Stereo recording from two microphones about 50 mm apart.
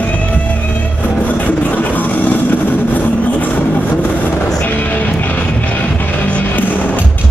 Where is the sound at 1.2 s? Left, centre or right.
Left.